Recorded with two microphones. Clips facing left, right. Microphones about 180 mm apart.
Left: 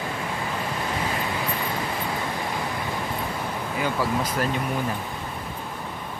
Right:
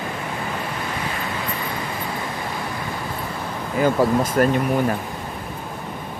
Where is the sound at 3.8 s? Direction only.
50° right (ahead or behind).